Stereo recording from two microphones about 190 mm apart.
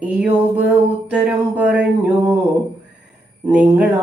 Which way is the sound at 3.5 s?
5° right (ahead or behind).